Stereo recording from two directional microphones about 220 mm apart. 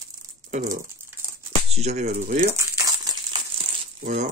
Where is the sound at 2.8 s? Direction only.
15° right (ahead or behind).